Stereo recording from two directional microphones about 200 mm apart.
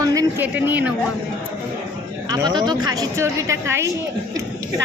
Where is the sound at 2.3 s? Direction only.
20° right (ahead or behind).